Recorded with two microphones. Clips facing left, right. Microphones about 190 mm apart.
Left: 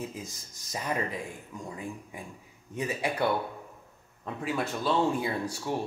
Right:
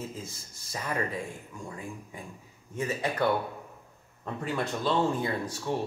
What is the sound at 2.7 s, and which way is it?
Speech, 15° left (ahead or behind).